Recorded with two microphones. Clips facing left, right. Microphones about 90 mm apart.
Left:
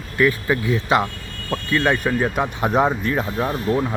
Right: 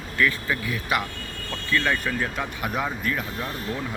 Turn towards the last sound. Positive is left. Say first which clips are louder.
# left 10 dB
turn(degrees=50)  # may be behind; listen again after turning